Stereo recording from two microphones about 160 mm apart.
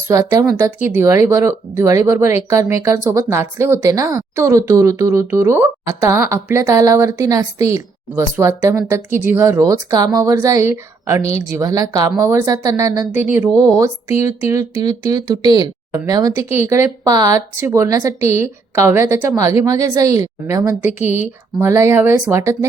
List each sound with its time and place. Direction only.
0.1 s speech: 20° right (ahead or behind)
21.0 s speech: 45° left (ahead or behind)
21.6 s speech: 15° right (ahead or behind)